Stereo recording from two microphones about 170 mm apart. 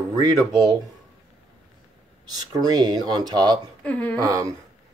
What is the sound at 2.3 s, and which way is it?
Speech, 25° right (ahead or behind).